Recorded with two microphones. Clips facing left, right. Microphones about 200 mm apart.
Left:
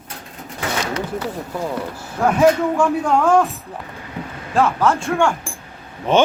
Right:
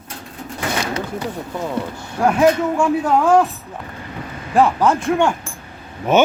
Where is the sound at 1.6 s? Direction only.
Centre (ahead or behind).